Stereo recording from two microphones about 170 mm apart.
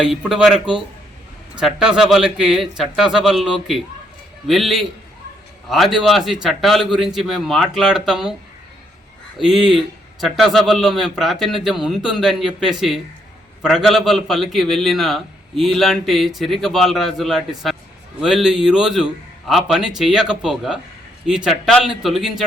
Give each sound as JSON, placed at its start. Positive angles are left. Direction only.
{"t": 0.0, "sound": "a man's voice", "side_deg": -5}
{"t": 9.4, "sound": "a man's voice", "side_deg": 0}